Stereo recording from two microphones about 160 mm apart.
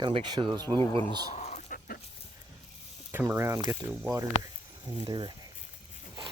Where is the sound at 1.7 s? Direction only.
65° left (ahead or behind).